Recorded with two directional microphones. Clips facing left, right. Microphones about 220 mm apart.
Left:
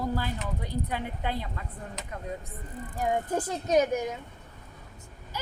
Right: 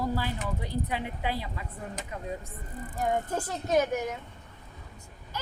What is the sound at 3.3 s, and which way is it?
Speech, 20° left (ahead or behind).